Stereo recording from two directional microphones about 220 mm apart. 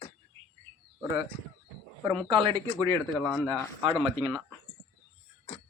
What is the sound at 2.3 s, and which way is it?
Speech, 25° right (ahead or behind).